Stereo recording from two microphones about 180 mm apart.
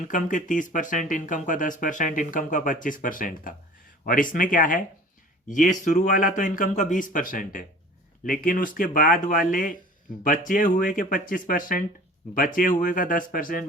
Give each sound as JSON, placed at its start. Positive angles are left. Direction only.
{"t": 0.0, "sound": "speech", "side_deg": 45}